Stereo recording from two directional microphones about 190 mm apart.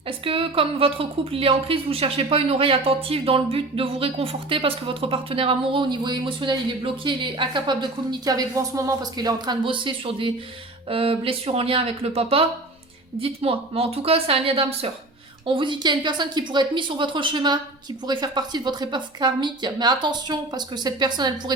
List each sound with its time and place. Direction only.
0.3 s speech: 30° right (ahead or behind)